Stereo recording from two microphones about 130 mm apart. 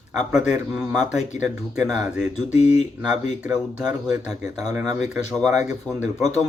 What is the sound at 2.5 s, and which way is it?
Speech, 60° left (ahead or behind).